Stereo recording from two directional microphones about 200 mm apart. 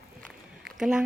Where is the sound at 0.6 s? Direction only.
Centre (ahead or behind).